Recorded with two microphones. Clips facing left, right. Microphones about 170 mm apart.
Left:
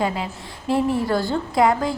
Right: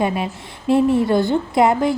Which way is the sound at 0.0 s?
20° right (ahead or behind).